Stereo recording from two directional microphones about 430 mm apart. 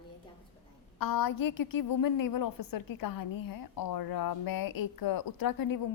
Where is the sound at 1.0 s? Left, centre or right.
Left.